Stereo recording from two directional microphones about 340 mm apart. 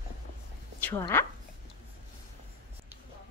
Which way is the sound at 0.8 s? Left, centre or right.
Centre.